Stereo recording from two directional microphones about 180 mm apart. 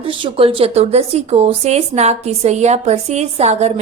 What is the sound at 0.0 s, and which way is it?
A woman's voice, 30° right (ahead or behind).